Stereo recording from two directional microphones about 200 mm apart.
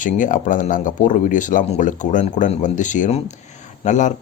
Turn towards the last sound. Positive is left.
turn(degrees=35)  # may be behind; listen again after turning